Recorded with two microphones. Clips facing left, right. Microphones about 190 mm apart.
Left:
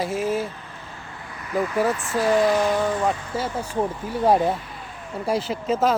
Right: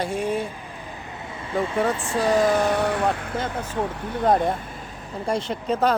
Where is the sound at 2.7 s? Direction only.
70° right (ahead or behind).